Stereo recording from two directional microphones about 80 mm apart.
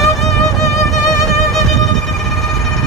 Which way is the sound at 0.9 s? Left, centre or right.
Left.